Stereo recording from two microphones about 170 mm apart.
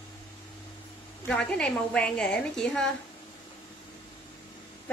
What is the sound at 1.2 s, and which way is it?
A woman's voice, 5° left (ahead or behind).